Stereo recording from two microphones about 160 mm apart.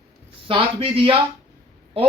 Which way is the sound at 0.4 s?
35° right (ahead or behind).